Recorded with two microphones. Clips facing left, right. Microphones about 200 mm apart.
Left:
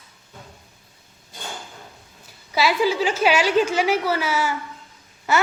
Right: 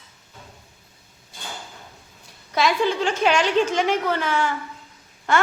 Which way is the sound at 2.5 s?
5° left (ahead or behind).